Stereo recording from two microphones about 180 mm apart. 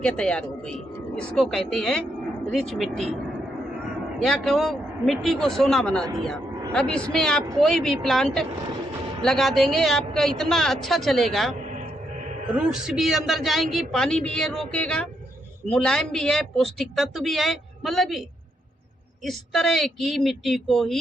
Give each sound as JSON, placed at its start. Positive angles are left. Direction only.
{"t": 0.0, "sound": "a woman's voice", "side_deg": 5}
{"t": 11.7, "sound": "music", "side_deg": -40}
{"t": 12.5, "sound": "a woman's voice", "side_deg": -5}